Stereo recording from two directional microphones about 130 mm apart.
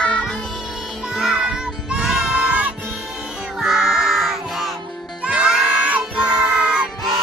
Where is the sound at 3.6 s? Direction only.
5° right (ahead or behind).